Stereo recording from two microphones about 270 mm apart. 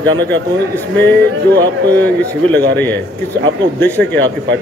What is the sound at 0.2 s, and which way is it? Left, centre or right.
Speech, centre.